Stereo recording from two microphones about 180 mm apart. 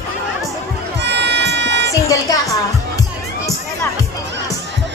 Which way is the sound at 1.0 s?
75° right (ahead or behind).